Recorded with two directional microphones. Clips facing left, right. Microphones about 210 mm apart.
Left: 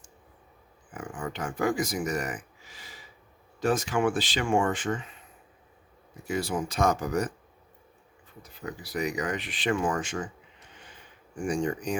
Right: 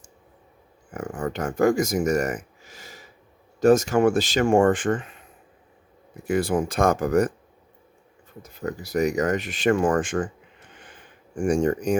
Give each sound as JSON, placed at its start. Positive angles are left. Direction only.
{"t": 0.9, "sound": "speech", "side_deg": -40}
{"t": 6.2, "sound": "speech", "side_deg": -55}
{"t": 8.4, "sound": "speech", "side_deg": -45}